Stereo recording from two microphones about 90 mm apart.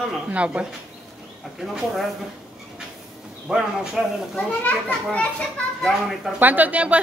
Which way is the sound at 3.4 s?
5° right (ahead or behind).